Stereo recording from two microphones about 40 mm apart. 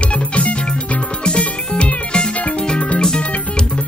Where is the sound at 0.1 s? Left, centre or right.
Left.